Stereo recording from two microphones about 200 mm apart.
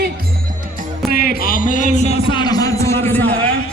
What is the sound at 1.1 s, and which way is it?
A man's voice, 45° left (ahead or behind).